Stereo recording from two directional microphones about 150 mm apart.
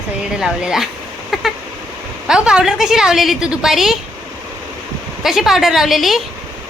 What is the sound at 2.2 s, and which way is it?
A woman's voice, 5° right (ahead or behind).